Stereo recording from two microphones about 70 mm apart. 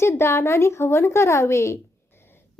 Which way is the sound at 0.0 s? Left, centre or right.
Left.